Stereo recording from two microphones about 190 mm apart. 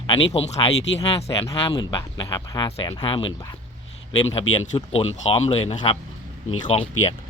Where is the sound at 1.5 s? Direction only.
20° left (ahead or behind).